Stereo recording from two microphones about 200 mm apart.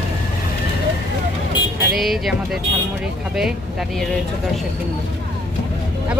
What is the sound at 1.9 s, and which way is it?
Speech, centre (ahead or behind).